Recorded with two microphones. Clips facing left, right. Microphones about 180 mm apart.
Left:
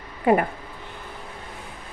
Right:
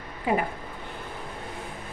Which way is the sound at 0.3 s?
55° left (ahead or behind).